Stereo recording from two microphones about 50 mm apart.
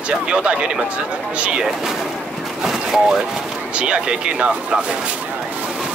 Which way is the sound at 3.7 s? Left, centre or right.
Centre.